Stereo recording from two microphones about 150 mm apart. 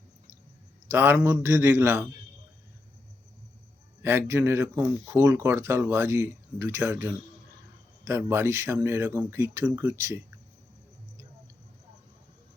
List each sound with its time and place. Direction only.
0.9 s speech: 15° right (ahead or behind)
4.0 s speech: 15° right (ahead or behind)